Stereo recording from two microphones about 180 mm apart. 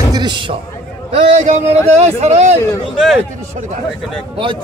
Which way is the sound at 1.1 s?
40° right (ahead or behind).